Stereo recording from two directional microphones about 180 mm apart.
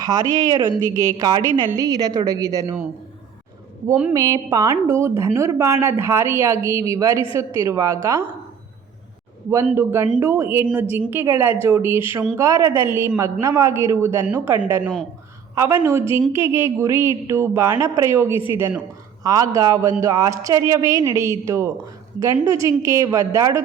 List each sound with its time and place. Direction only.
0.0 s a woman's voice: 20° right (ahead or behind)
4.1 s a woman's voice: 20° right (ahead or behind)
9.7 s a woman's voice: 10° right (ahead or behind)